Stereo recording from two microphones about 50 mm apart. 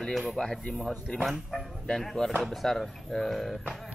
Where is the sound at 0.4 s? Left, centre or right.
Centre.